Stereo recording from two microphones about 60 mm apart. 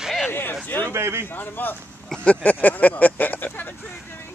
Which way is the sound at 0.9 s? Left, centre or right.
Right.